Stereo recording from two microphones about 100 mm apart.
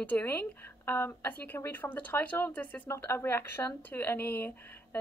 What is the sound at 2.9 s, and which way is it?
Speech, 25° left (ahead or behind).